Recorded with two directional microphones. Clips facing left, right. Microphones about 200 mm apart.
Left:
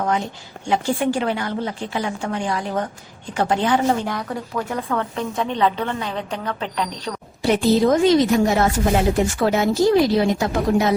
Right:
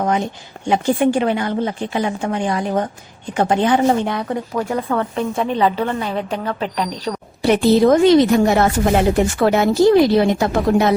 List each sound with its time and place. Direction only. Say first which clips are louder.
0.0 s a woman's voice: right 3 dB; 20° right (ahead or behind)
4.7 s a woman's voice: right 4 dB; 10° right (ahead or behind)
7.4 s speech: right 4 dB; 65° right (ahead or behind)